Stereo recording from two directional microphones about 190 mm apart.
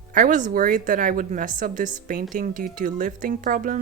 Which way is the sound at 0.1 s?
45° right (ahead or behind).